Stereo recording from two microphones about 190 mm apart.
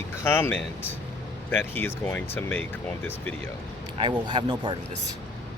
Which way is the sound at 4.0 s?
25° right (ahead or behind).